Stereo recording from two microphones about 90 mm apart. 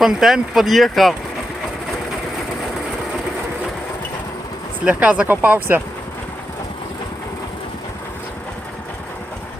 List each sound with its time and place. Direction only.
0.0 s speech: 5° right (ahead or behind)
4.9 s speech: 15° right (ahead or behind)